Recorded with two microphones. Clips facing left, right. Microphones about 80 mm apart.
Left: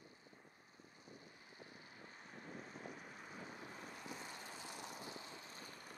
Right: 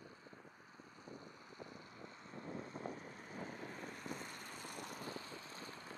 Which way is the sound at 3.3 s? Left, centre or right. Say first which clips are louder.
Right 6 dB; right.